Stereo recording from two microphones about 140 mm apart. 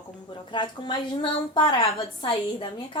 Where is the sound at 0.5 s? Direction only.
35° left (ahead or behind).